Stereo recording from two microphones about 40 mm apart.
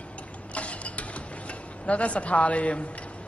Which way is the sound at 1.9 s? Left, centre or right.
Left.